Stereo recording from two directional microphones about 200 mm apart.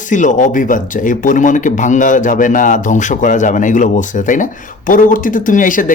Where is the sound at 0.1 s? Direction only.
40° left (ahead or behind).